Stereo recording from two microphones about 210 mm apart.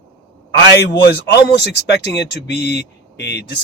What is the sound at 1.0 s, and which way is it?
Speech, 55° left (ahead or behind).